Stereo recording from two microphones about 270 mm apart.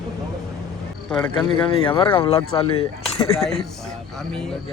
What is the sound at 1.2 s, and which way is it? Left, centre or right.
Speech, centre.